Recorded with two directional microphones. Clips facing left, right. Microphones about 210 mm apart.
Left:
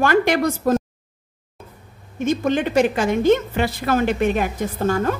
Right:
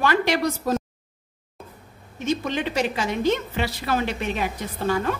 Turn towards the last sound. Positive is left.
turn(degrees=45)  # may be behind; listen again after turning